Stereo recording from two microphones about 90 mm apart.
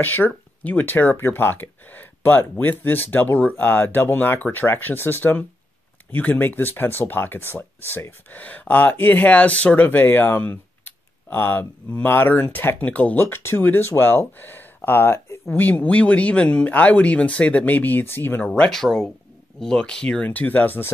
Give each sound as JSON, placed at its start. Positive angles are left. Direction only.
{"t": 0.0, "sound": "speech", "side_deg": 20}
{"t": 18.5, "sound": "speech", "side_deg": 5}